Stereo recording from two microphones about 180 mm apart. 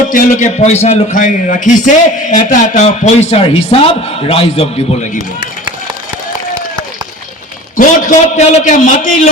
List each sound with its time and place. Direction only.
0.1 s a man's voice: 45° left (ahead or behind)
7.8 s a man's voice: 40° left (ahead or behind)